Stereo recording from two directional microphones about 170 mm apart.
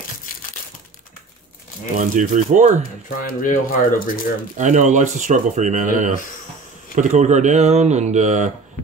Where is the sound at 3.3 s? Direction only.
55° left (ahead or behind).